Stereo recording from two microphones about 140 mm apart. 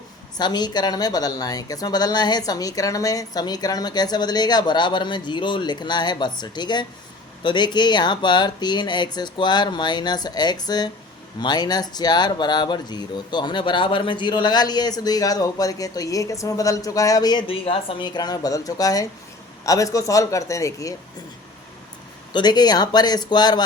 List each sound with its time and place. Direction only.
0.3 s speech: 30° left (ahead or behind)
22.3 s speech: 30° left (ahead or behind)